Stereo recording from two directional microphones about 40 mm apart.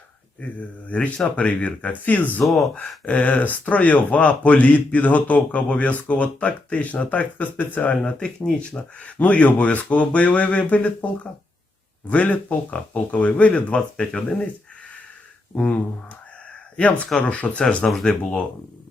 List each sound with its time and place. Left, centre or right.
0.9 s speech: left
2.4 s speech: centre
3.1 s speech: left
8.6 s speech: left
9.1 s speech: left
15.5 s speech: left